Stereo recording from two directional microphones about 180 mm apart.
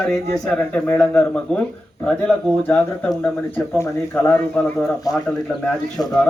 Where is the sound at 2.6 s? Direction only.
5° left (ahead or behind).